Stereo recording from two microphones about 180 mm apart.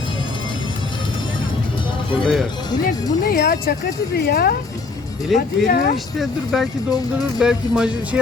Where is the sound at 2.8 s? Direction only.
55° left (ahead or behind).